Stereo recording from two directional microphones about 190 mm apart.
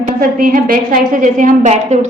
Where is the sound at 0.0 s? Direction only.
50° right (ahead or behind).